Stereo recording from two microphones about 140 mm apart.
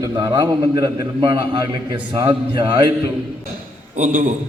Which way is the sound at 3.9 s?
75° right (ahead or behind).